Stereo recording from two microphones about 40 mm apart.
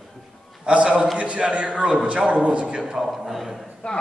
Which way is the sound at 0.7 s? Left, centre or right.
Right.